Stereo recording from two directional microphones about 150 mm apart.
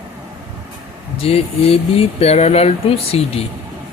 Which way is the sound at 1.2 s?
40° left (ahead or behind).